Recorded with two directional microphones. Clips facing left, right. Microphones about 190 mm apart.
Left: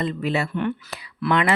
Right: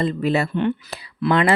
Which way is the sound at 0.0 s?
35° right (ahead or behind).